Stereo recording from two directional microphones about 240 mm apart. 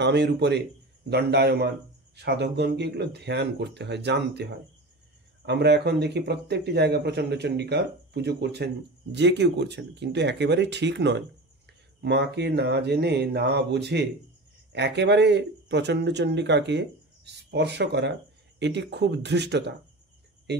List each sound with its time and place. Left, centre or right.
0.0 s speech: right